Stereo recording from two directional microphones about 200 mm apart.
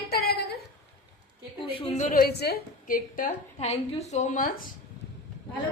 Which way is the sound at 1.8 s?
35° left (ahead or behind).